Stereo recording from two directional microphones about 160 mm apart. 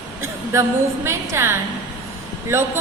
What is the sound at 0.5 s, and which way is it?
A woman's voice, 20° right (ahead or behind).